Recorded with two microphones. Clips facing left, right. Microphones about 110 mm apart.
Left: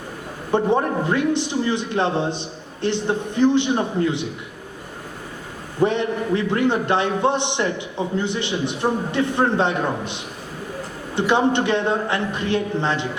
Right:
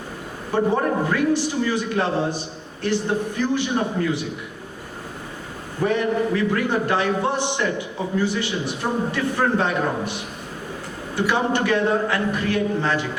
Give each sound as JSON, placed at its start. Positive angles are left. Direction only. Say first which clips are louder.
{"t": 0.5, "sound": "a man's voice", "louder": "left 1 dB", "side_deg": 20}
{"t": 5.8, "sound": "a man's voice", "louder": "left 1 dB", "side_deg": 25}